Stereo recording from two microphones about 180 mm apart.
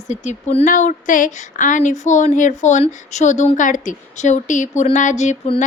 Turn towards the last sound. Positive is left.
turn(degrees=35)  # may be behind; listen again after turning